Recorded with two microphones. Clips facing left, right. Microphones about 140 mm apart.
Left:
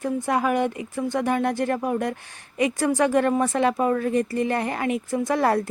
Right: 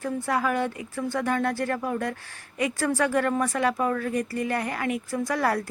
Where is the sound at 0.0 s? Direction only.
20° left (ahead or behind).